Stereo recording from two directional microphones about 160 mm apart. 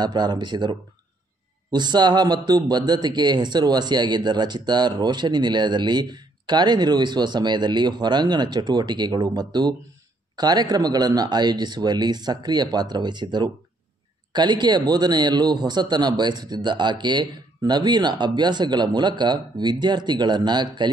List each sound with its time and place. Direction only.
0.0 s a man's voice: 25° right (ahead or behind)